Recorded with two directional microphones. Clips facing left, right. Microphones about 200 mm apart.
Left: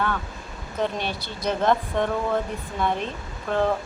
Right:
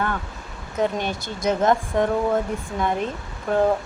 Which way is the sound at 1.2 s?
45° right (ahead or behind).